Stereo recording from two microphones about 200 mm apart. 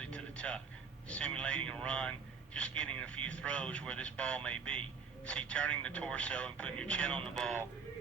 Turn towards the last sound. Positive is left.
turn(degrees=5)  # may be behind; listen again after turning